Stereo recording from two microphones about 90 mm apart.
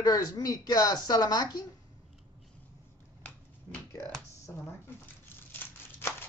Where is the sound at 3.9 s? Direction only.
30° left (ahead or behind).